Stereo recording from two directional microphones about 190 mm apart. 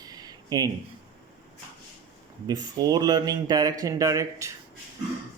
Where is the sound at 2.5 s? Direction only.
20° right (ahead or behind).